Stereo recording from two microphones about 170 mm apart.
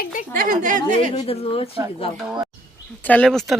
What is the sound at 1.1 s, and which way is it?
Speech, 35° left (ahead or behind).